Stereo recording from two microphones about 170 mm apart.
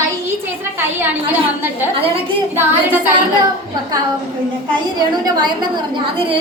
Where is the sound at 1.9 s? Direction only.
35° right (ahead or behind).